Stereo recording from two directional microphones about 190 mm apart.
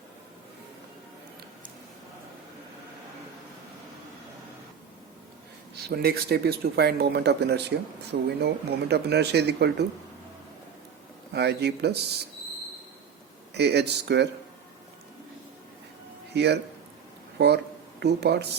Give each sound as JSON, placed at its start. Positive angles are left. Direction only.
{"t": 5.9, "sound": "speech", "side_deg": -55}
{"t": 11.3, "sound": "speech", "side_deg": -60}
{"t": 13.5, "sound": "speech", "side_deg": -60}
{"t": 16.3, "sound": "speech", "side_deg": -60}